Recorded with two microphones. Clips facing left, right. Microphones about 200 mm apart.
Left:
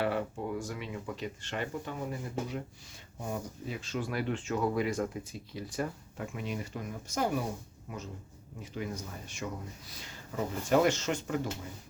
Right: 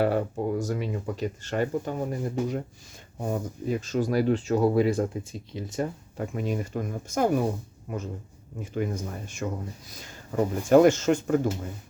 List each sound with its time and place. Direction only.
0.0 s speech: 40° right (ahead or behind); by 5.9 s 25° right (ahead or behind)
6.1 s speech: 40° right (ahead or behind)
8.6 s speech: 50° right (ahead or behind)
10.7 s speech: 50° right (ahead or behind)